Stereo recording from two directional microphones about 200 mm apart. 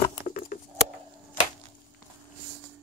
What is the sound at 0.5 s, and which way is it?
Bird, 45° left (ahead or behind).